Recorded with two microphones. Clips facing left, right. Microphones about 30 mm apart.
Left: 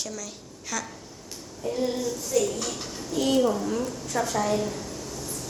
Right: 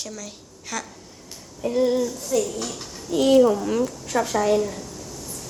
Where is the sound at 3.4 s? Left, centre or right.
Right.